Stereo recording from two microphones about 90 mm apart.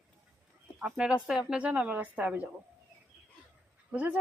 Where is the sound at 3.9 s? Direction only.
20° right (ahead or behind).